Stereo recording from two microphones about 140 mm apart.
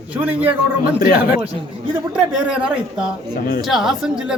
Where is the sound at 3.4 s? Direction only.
90° left.